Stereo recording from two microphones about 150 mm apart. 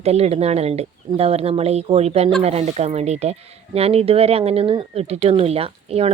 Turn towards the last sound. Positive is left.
turn(degrees=-40)  # may be behind; listen again after turning